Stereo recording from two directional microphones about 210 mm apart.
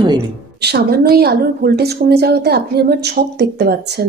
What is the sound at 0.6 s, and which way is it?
A woman's voice, 50° right (ahead or behind).